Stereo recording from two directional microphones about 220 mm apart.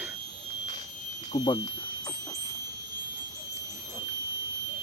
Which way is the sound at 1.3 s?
30° left (ahead or behind).